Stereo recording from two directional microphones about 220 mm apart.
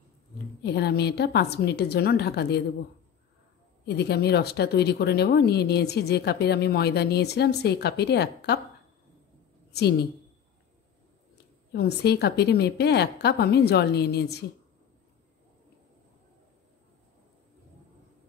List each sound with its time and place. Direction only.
0.6 s speech: 50° left (ahead or behind)
3.8 s speech: 50° left (ahead or behind)
9.7 s a woman's voice: 50° left (ahead or behind)
11.7 s speech: 50° left (ahead or behind)